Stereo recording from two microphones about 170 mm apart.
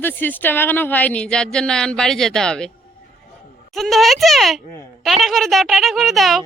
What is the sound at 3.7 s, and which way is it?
A woman's voice, centre (ahead or behind).